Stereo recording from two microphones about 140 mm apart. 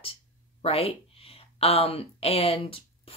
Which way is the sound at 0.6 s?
45° left (ahead or behind).